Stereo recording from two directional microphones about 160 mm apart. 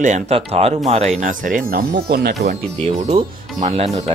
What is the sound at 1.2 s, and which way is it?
Speech, 55° right (ahead or behind).